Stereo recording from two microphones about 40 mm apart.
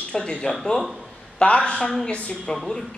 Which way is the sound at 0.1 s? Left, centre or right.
Centre.